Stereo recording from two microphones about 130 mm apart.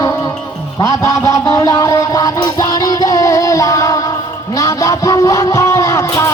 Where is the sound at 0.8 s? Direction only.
25° left (ahead or behind).